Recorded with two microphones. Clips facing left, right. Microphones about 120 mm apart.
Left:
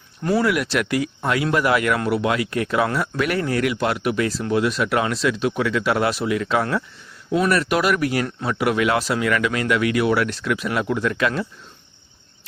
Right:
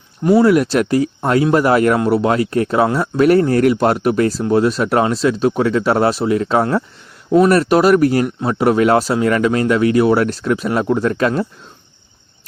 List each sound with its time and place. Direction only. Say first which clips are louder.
0.2 s speech: right 8 dB; 20° right (ahead or behind)
0.4 s speech: right 8 dB; 35° right (ahead or behind)